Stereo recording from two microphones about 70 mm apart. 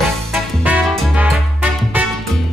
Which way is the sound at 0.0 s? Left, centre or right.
Centre.